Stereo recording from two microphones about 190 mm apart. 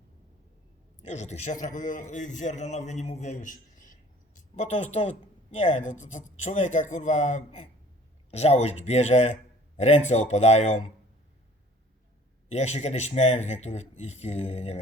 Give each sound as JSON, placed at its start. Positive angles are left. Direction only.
{"t": 1.0, "sound": "a man's voice", "side_deg": 35}
{"t": 12.5, "sound": "a man's voice", "side_deg": 35}